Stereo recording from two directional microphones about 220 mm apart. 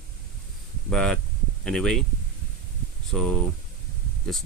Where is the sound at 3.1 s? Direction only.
5° left (ahead or behind).